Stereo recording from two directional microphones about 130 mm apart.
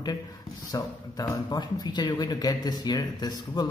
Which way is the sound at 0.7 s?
30° left (ahead or behind).